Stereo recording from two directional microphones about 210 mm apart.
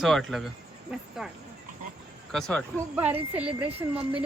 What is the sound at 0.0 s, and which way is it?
Speech, centre (ahead or behind).